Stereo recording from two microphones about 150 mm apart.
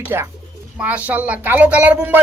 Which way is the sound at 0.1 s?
20° right (ahead or behind).